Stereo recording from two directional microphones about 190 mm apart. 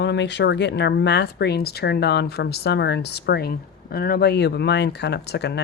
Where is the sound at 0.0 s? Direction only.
65° left (ahead or behind).